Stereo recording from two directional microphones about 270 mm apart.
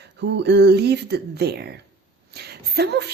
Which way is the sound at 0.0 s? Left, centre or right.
Right.